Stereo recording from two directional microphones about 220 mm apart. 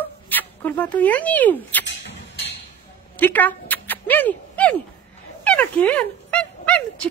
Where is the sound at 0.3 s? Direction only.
10° left (ahead or behind).